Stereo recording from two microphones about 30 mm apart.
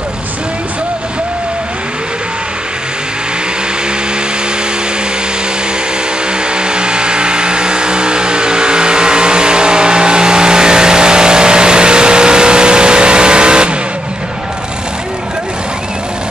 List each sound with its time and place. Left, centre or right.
6.5 s vehicle: right